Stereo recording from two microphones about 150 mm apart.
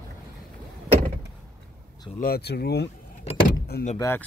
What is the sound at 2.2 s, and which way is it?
Speech, 90° left.